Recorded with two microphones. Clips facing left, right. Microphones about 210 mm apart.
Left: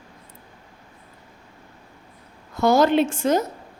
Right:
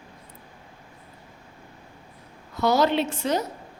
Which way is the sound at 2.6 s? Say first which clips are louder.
Left 4 dB; 50° left (ahead or behind).